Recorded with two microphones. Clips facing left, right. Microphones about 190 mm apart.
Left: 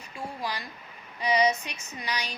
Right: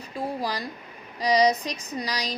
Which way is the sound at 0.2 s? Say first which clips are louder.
Right 6 dB; 35° right (ahead or behind).